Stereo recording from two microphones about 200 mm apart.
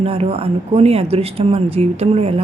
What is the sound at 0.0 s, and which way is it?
A woman's voice, 30° right (ahead or behind).